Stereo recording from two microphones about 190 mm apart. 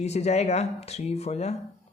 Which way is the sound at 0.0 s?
35° left (ahead or behind).